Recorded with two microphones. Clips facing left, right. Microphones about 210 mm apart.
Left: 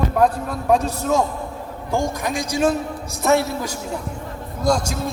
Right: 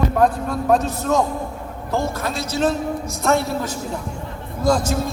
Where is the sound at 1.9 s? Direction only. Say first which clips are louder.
Left 1 dB; 15° left (ahead or behind); by 4.9 s 5° right (ahead or behind).